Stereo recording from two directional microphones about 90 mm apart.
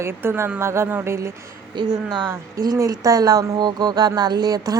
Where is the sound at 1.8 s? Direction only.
60° right (ahead or behind).